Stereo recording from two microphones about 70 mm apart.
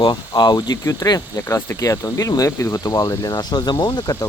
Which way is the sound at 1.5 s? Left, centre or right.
Left.